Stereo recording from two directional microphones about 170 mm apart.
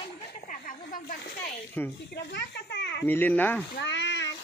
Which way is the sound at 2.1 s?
85° left.